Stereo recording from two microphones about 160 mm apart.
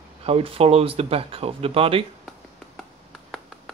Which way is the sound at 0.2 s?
35° right (ahead or behind).